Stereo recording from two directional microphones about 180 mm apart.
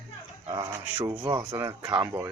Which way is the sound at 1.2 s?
25° right (ahead or behind).